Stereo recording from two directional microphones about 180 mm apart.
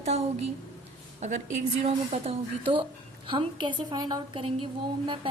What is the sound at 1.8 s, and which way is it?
A woman's voice, 35° right (ahead or behind).